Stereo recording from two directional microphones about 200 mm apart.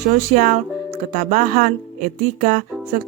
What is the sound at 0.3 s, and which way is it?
Speech, 40° right (ahead or behind).